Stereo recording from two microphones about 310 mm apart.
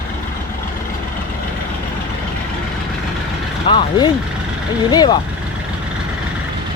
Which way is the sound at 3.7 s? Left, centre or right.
Centre.